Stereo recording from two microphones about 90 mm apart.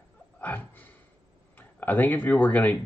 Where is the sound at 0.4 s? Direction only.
20° left (ahead or behind).